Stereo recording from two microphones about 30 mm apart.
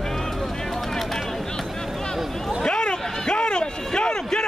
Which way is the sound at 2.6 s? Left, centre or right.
Left.